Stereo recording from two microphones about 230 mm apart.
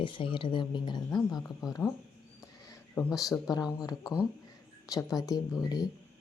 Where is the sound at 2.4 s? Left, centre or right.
Centre.